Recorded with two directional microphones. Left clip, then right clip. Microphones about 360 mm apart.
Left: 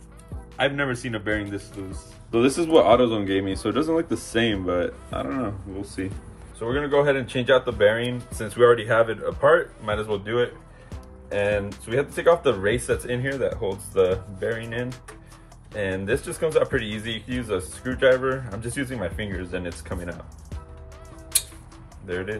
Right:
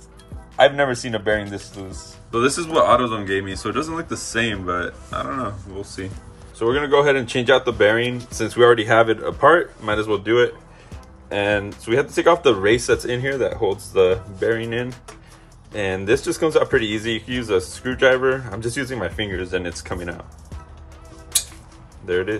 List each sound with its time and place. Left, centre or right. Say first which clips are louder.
0.6 s speech: right 8 dB; centre
2.3 s speech: even; centre
6.6 s speech: right 5 dB; right